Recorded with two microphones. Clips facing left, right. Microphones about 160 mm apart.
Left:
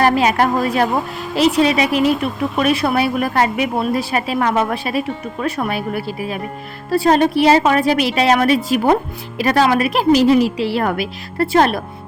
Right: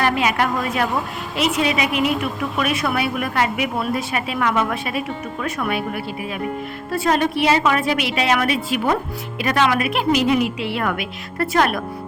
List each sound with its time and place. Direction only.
0.0 s a woman's voice: 35° left (ahead or behind)